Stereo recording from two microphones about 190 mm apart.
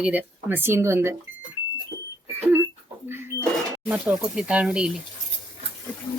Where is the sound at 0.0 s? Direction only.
10° right (ahead or behind).